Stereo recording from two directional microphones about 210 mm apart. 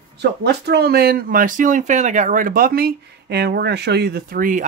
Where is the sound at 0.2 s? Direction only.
50° right (ahead or behind).